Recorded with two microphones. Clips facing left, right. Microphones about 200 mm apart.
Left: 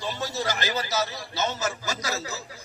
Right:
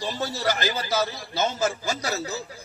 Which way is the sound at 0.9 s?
55° right (ahead or behind).